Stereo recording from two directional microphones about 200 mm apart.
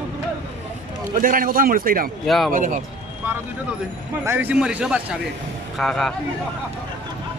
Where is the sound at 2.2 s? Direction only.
Centre (ahead or behind).